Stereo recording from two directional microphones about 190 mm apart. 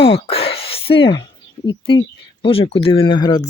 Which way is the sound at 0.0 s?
30° left (ahead or behind).